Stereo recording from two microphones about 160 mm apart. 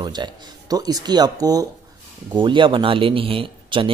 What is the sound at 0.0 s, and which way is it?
Speech, 25° right (ahead or behind).